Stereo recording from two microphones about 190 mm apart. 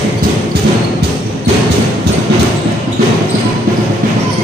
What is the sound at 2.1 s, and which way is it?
Music, 60° right (ahead or behind).